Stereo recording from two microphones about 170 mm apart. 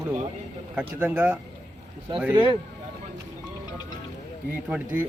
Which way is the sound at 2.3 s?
30° right (ahead or behind).